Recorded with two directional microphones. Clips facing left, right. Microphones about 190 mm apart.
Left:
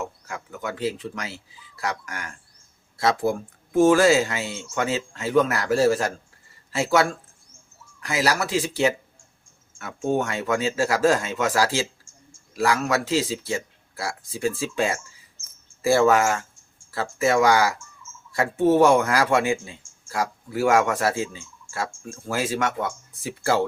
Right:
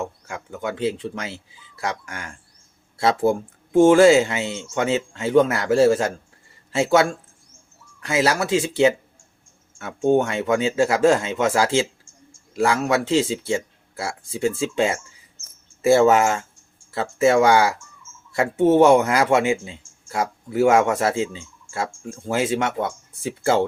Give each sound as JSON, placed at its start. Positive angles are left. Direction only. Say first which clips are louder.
{"t": 0.0, "sound": "speech", "louder": "right 2 dB", "side_deg": -25}